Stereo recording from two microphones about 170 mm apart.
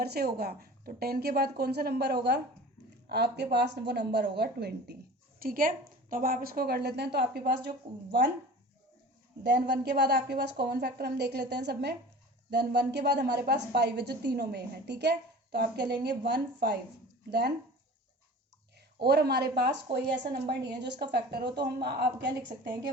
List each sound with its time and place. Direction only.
0.0 s a woman's voice: 65° right (ahead or behind)
5.4 s a woman's voice: 60° right (ahead or behind); by 8.3 s 80° right
9.4 s a woman's voice: 75° right (ahead or behind)
18.9 s a woman's voice: 70° right (ahead or behind)